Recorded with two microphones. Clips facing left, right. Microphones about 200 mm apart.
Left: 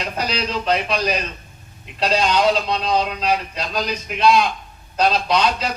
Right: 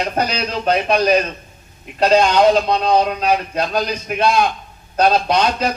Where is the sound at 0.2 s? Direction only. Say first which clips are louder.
Right 3 dB; 50° right (ahead or behind).